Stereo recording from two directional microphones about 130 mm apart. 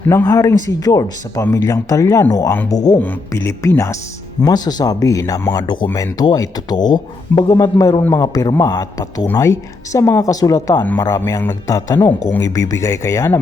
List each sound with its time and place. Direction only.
0.1 s speech: 25° left (ahead or behind)
3.0 s speech: 15° left (ahead or behind)